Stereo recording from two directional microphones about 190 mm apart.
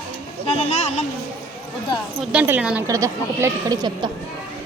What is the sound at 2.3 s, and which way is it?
A woman's voice, 5° right (ahead or behind).